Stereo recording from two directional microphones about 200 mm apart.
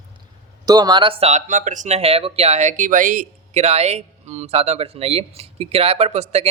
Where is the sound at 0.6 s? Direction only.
20° right (ahead or behind).